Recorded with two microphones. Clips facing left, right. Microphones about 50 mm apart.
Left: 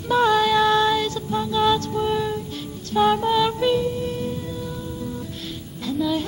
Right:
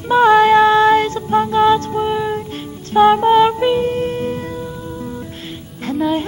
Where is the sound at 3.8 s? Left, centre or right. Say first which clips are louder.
Right 6 dB; right.